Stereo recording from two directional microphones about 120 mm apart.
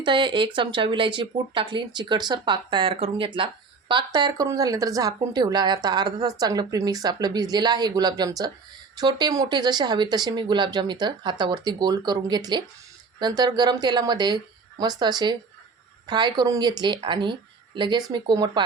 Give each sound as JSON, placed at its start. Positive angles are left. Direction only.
{"t": 0.0, "sound": "speech", "side_deg": -40}